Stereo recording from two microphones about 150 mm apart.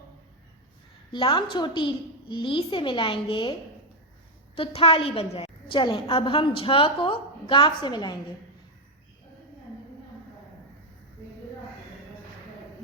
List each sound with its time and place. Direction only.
1.1 s a woman's voice: 30° left (ahead or behind)
4.5 s a woman's voice: 40° left (ahead or behind)